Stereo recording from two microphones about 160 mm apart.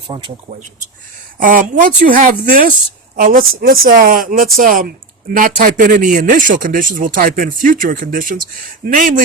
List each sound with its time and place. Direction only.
0.1 s speech: 30° right (ahead or behind)
1.4 s a man's voice: 60° right (ahead or behind)